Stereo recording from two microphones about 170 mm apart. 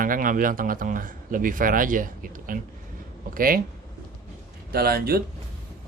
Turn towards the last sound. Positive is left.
turn(degrees=-65)  # may be behind; listen again after turning